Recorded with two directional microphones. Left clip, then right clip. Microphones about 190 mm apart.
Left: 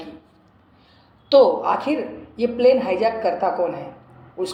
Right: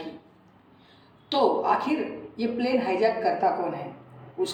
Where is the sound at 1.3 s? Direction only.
45° left (ahead or behind).